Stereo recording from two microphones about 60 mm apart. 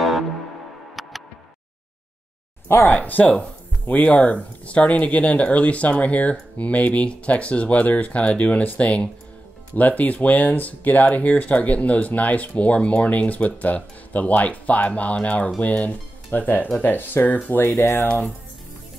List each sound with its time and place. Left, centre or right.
1.0 s tick: centre
2.7 s speech: left